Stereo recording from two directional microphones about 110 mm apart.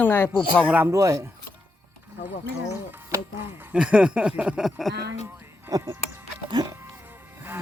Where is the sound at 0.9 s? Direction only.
25° right (ahead or behind).